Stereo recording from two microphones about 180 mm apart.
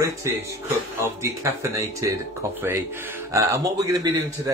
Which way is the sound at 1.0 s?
15° right (ahead or behind).